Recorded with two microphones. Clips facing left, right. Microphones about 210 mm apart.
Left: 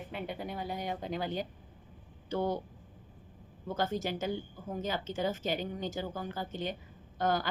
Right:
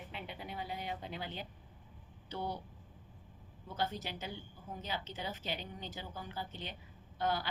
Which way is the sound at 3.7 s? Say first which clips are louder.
Left 6 dB; 45° left (ahead or behind).